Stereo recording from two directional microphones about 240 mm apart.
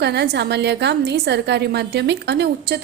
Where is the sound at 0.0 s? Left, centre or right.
Right.